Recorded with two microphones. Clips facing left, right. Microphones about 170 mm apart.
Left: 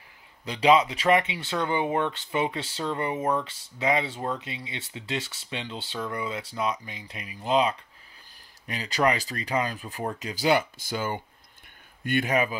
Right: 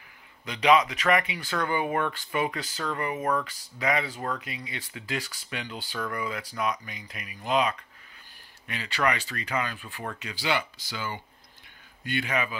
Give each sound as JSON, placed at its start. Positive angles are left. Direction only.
{"t": 0.5, "sound": "speech", "side_deg": 30}